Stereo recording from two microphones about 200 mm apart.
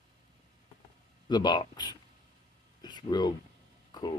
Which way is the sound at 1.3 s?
20° left (ahead or behind).